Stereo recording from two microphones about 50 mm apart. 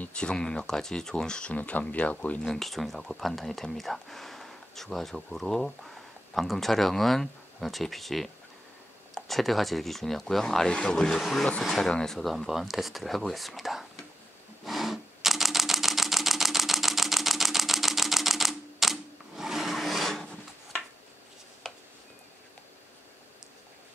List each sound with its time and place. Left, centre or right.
0.1 s speech: centre
1.6 s speech: left
2.4 s speech: centre
9.3 s speech: centre
11.1 s speech: centre
12.4 s speech: centre
14.6 s camera: centre
21.6 s a sound: centre